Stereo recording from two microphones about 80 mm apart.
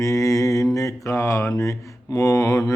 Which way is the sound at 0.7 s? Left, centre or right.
Left.